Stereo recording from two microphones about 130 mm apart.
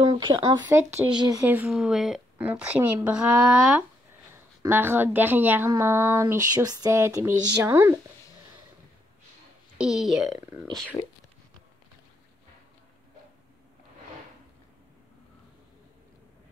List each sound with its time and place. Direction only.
0.0 s speech: 35° right (ahead or behind)
1.4 s speech: 15° right (ahead or behind)
4.6 s speech: 15° right (ahead or behind)
5.8 s a sound: 20° right (ahead or behind)
9.8 s speech: 5° right (ahead or behind)